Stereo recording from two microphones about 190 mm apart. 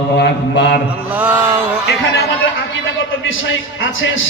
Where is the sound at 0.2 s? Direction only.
60° left (ahead or behind).